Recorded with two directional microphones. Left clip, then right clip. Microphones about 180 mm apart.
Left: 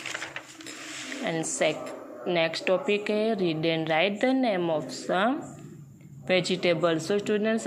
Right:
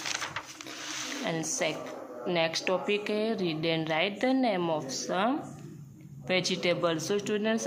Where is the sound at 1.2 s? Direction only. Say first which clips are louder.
Left 5 dB; 15° left (ahead or behind).